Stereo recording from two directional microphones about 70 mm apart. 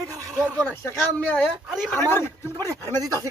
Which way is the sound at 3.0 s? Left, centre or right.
Right.